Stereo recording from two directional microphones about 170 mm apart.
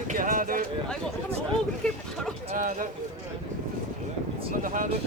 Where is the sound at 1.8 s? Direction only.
5° left (ahead or behind).